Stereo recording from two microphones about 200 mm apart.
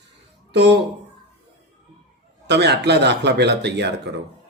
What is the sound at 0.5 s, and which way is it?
Speech, 60° right (ahead or behind).